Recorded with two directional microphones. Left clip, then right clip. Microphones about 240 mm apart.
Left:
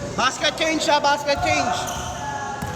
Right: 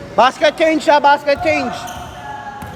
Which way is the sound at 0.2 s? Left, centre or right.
Right.